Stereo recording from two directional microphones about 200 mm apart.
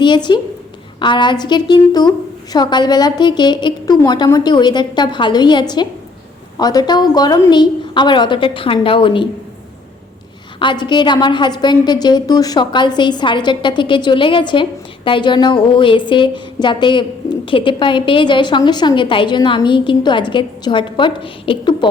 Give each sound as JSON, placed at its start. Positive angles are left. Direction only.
{"t": 0.0, "sound": "a woman's voice", "side_deg": 20}
{"t": 10.6, "sound": "a woman's voice", "side_deg": 25}